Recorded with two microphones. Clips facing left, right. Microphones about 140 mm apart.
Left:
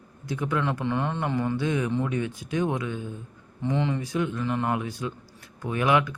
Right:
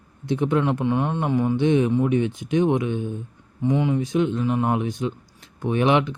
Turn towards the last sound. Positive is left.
turn(degrees=-25)  # may be behind; listen again after turning